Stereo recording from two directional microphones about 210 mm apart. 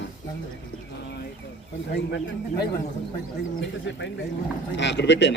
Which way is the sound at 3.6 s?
60° left (ahead or behind).